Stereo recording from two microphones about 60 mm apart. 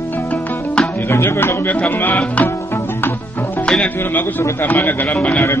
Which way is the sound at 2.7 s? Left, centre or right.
Left.